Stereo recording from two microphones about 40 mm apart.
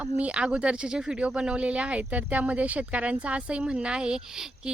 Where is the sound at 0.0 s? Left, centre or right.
Right.